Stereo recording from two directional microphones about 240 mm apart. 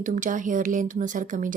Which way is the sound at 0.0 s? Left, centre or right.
Right.